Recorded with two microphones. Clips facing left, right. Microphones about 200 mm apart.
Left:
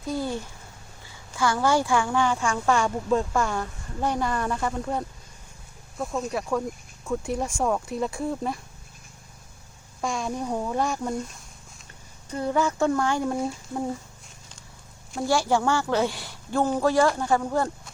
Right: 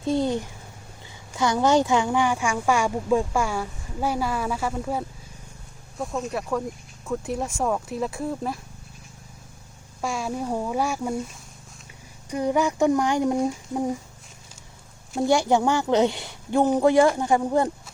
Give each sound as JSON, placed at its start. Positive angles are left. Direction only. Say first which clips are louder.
{"t": 0.0, "sound": "a woman's voice", "louder": "right 5 dB", "side_deg": -25}
{"t": 10.0, "sound": "a woman's voice", "louder": "right 1 dB", "side_deg": -5}
{"t": 12.3, "sound": "a woman's voice", "louder": "right 2 dB", "side_deg": -15}
{"t": 15.1, "sound": "a woman's voice", "louder": "right 3 dB", "side_deg": -20}